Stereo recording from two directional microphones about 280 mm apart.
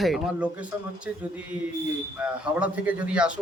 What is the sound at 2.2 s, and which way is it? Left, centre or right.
Speech, centre.